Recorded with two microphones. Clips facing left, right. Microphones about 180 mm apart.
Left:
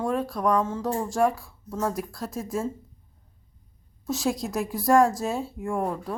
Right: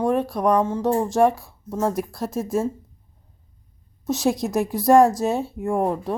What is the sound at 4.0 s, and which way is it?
A woman's voice, 20° right (ahead or behind).